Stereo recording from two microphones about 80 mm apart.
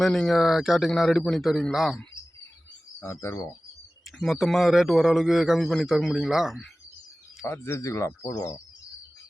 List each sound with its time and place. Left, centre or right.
0.0 s a man's voice: centre
3.0 s speech: left
4.2 s a man's voice: centre
7.4 s speech: left